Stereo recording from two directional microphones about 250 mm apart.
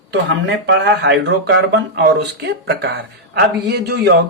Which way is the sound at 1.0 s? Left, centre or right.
Right.